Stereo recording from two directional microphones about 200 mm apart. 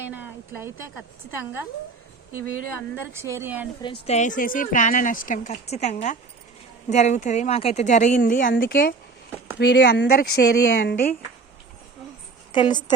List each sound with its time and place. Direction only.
0.1 s speech: 10° right (ahead or behind)
3.1 s speech: 10° right (ahead or behind)
4.0 s speech: 35° left (ahead or behind)
9.6 s speech: 60° left (ahead or behind)
12.5 s a woman's voice: 25° left (ahead or behind)